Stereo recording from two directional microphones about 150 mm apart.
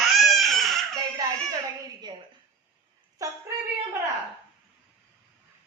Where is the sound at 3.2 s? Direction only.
25° right (ahead or behind).